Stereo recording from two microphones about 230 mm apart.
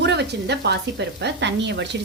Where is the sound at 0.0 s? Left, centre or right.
Right.